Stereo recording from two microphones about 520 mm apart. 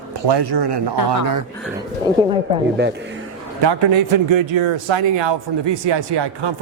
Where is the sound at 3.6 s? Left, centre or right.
Right.